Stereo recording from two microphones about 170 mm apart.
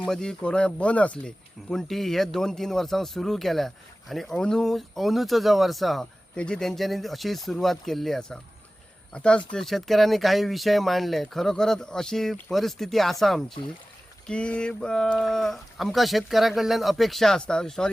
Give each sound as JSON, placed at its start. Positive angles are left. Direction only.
{"t": 0.0, "sound": "speech", "side_deg": 5}